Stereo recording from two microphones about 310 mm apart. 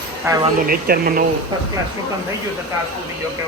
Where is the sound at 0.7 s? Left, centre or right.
Right.